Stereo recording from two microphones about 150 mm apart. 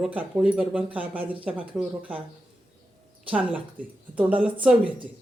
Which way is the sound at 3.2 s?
10° right (ahead or behind).